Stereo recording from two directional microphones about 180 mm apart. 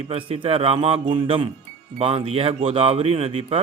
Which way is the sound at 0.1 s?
30° right (ahead or behind).